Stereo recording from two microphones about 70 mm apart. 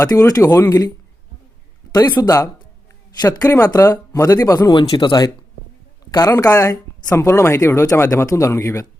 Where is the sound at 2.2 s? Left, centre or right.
Left.